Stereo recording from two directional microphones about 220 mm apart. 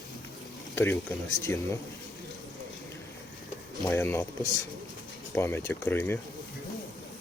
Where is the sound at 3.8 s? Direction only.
10° left (ahead or behind).